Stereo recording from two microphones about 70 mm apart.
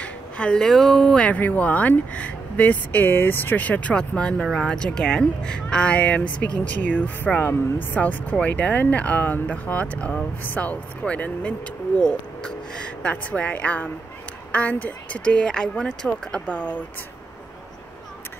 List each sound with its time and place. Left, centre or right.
0.0 s speech: centre
12.0 s a sound: centre
13.1 s speech: left